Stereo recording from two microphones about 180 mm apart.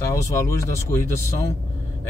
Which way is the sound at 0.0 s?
15° left (ahead or behind).